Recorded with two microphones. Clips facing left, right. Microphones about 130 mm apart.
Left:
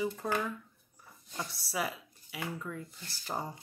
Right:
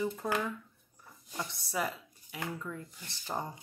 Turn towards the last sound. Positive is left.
turn(degrees=5)  # may be behind; listen again after turning